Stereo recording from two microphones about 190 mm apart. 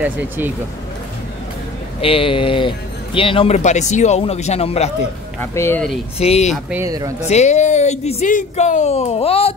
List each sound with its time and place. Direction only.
2.0 s speech: 30° left (ahead or behind)
5.4 s speech: 15° left (ahead or behind)
6.1 s speech: 35° left (ahead or behind)
6.5 s speech: 10° right (ahead or behind)
7.2 s speech: 35° left (ahead or behind)